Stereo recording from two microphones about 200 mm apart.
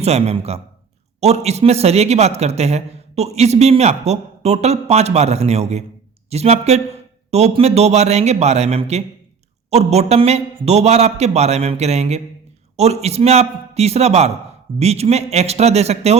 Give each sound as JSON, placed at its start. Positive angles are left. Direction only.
{"t": 0.0, "sound": "a man's voice", "side_deg": -30}